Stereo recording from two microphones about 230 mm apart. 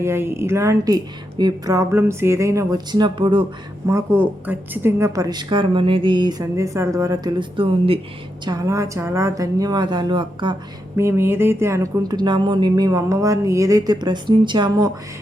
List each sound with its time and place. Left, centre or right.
0.0 s a woman's voice: centre